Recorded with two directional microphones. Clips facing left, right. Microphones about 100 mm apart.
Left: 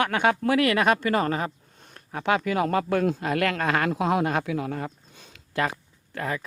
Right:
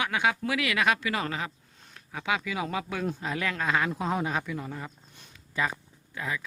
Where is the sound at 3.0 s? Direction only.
70° left (ahead or behind).